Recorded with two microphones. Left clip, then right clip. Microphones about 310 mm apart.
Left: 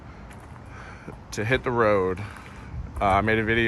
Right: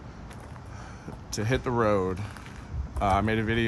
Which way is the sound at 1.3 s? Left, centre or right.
Centre.